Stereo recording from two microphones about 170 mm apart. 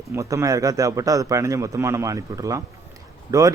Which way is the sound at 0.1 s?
15° right (ahead or behind).